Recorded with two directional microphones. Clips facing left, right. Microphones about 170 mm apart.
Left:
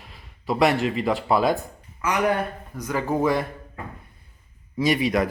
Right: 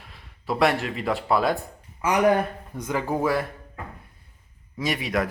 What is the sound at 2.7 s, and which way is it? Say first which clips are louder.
Speech: even; 25° right (ahead or behind).